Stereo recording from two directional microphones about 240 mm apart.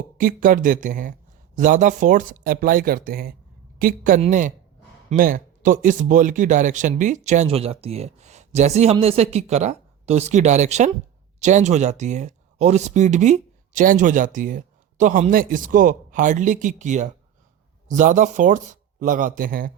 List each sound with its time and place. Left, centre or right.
0.2 s speech: right